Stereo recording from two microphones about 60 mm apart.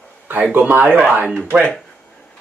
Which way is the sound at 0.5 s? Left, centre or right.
Right.